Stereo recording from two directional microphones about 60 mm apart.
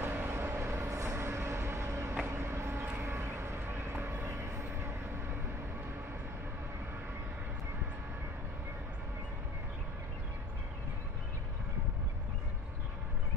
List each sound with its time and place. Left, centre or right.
0.0 s vehicle: right